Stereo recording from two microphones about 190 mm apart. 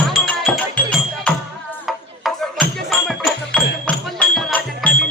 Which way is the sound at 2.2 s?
Centre (ahead or behind).